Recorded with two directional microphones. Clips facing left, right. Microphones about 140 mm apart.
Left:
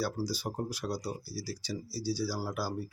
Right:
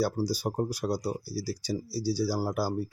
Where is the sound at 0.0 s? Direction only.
40° right (ahead or behind).